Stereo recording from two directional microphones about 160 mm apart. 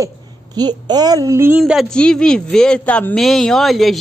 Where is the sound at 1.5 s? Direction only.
Centre (ahead or behind).